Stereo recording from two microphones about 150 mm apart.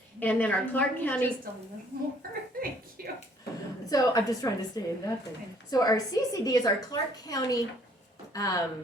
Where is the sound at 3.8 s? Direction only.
25° left (ahead or behind).